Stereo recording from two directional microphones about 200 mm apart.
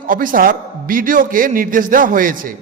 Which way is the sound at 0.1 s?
45° right (ahead or behind).